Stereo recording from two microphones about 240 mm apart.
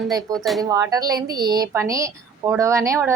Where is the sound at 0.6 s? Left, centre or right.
Centre.